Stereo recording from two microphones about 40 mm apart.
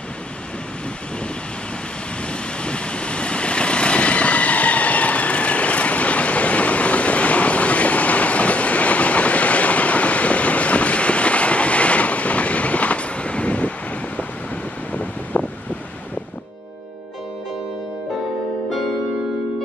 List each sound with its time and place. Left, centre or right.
2.2 s vehicle: left
14.9 s wind noise: left